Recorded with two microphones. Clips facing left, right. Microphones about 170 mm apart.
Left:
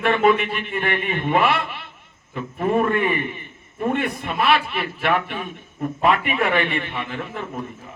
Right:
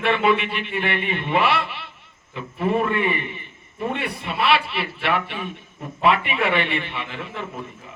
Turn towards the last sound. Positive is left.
turn(degrees=45)  # may be behind; listen again after turning